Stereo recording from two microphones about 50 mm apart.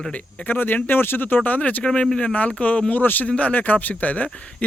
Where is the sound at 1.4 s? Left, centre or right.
Left.